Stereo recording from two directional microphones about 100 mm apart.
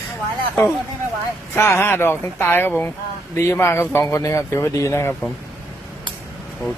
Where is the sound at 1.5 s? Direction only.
25° left (ahead or behind).